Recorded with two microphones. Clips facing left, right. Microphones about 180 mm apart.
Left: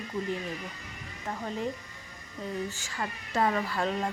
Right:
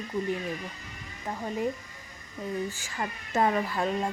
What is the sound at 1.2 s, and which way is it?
Speech, 10° right (ahead or behind).